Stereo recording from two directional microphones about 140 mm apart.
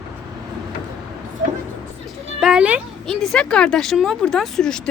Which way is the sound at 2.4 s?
5° right (ahead or behind).